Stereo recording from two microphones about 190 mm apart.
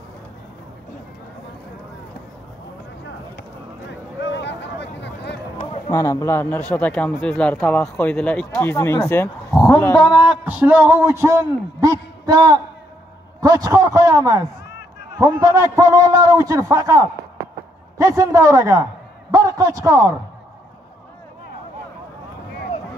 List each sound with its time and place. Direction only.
4.2 s a sound: 65° left (ahead or behind)
5.9 s speech: 20° left (ahead or behind)
10.4 s a man's voice: 10° right (ahead or behind)